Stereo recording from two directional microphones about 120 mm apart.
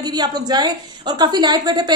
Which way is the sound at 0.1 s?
35° right (ahead or behind).